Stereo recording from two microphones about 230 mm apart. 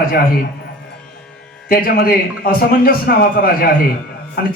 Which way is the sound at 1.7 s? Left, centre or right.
Left.